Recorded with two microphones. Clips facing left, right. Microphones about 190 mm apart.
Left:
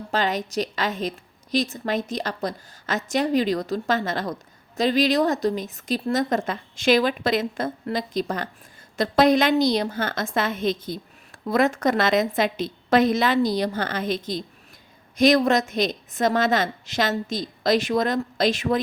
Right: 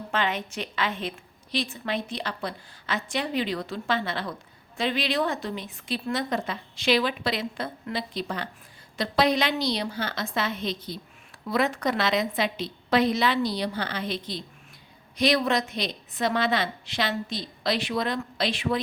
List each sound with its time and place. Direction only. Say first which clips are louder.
0.1 s a woman's voice: left 4 dB; 40° left (ahead or behind)